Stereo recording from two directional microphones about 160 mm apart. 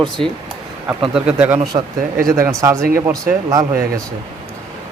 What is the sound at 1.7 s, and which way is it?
Speech, 30° right (ahead or behind).